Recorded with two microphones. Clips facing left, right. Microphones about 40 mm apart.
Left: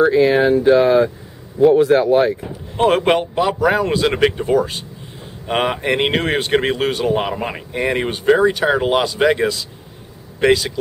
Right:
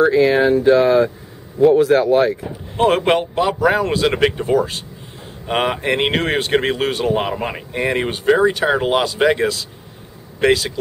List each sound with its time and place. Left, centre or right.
0.0 s speech: centre